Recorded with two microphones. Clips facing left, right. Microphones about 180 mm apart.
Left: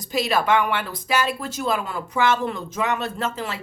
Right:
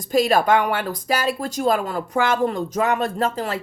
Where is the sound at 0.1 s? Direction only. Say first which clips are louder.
Right 4 dB; 45° right (ahead or behind).